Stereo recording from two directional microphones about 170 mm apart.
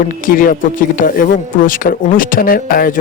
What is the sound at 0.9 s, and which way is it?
Speech, 55° left (ahead or behind).